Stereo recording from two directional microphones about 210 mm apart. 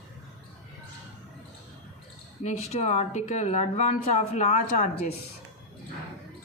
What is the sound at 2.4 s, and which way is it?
Speech, 30° left (ahead or behind).